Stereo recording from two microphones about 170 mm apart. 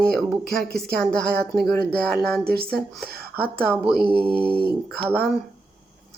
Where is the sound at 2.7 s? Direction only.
5° left (ahead or behind).